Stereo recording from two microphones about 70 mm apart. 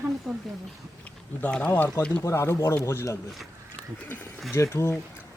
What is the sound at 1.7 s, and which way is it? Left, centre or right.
Speech, left.